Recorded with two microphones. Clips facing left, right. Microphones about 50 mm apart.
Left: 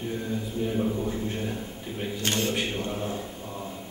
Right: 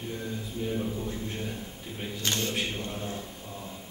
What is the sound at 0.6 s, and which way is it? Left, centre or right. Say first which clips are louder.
Speech: left 4 dB; centre.